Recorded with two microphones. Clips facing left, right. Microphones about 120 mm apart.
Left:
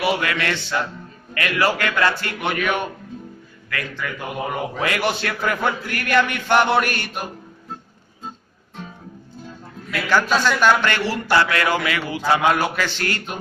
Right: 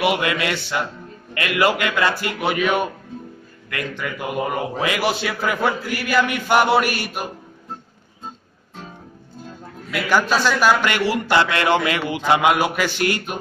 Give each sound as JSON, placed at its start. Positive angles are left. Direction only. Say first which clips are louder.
{"t": 0.0, "sound": "a man's voice", "louder": "right 2 dB", "side_deg": -20}
{"t": 4.4, "sound": "a man's voice", "louder": "right 1 dB", "side_deg": -5}
{"t": 9.8, "sound": "a man's voice", "louder": "even", "side_deg": -10}